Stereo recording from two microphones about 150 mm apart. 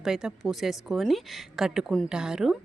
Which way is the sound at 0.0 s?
5° right (ahead or behind).